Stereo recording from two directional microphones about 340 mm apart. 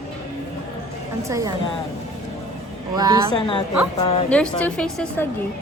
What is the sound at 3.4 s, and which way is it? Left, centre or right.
Speech, centre.